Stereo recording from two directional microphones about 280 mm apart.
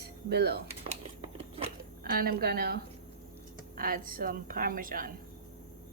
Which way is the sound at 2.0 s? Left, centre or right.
Right.